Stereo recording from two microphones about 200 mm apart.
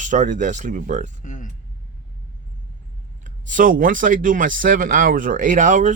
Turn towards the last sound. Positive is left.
turn(degrees=-40)  # may be behind; listen again after turning